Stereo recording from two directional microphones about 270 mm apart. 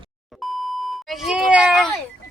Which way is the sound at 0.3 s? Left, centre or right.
Centre.